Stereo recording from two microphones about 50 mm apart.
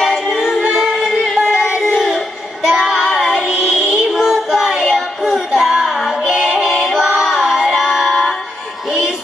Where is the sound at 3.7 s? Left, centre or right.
Centre.